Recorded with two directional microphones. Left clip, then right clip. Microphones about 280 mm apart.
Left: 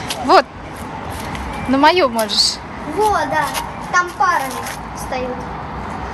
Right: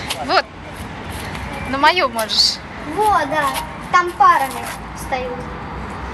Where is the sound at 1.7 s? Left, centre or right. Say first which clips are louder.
Left 2 dB; centre.